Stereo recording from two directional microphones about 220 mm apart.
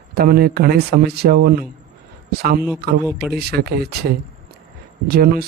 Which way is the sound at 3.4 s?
45° right (ahead or behind).